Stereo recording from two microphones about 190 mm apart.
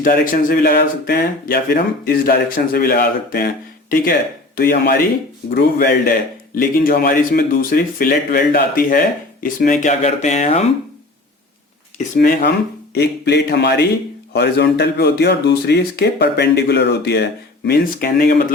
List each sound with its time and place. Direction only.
0.0 s speech: 50° left (ahead or behind)
11.9 s speech: 40° left (ahead or behind)
12.4 s speech: 60° left (ahead or behind)